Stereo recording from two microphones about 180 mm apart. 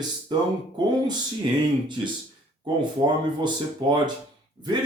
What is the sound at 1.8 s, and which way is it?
Speech, 25° right (ahead or behind).